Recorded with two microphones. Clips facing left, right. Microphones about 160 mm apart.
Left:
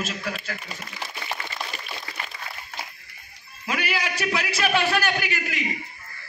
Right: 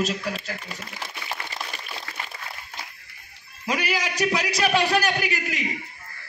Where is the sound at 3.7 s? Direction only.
35° right (ahead or behind).